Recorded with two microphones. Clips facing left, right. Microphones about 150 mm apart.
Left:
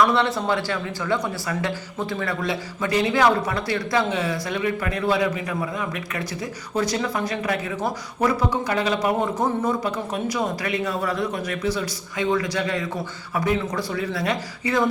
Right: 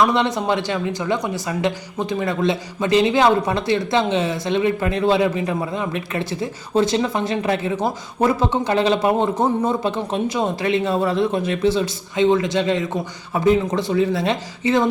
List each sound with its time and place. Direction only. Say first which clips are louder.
0.0 s a man's voice: right 2 dB; 20° right (ahead or behind)